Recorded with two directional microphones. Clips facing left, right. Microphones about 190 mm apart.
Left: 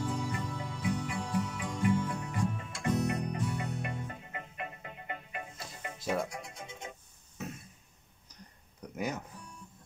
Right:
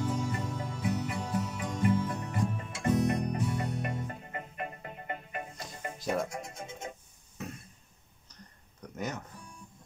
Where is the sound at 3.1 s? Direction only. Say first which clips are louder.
Right 3 dB; 40° right (ahead or behind).